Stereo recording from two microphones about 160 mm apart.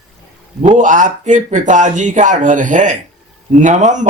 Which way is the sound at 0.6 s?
50° right (ahead or behind).